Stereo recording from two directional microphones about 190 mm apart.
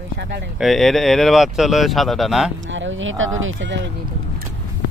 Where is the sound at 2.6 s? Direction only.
80° right.